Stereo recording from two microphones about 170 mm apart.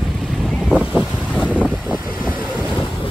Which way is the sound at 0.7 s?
5° right (ahead or behind).